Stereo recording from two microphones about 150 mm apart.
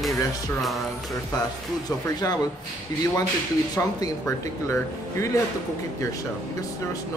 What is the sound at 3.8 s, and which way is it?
Speech, 20° left (ahead or behind).